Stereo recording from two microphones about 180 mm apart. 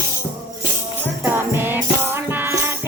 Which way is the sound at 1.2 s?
10° right (ahead or behind).